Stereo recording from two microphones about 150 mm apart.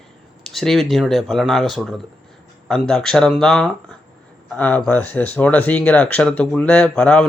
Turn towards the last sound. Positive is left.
turn(degrees=5)  # may be behind; listen again after turning